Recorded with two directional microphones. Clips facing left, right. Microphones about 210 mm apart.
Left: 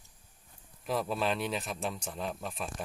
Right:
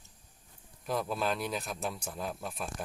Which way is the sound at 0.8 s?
Centre (ahead or behind).